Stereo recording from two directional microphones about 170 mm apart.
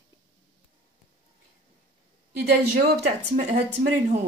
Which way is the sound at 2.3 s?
75° right (ahead or behind).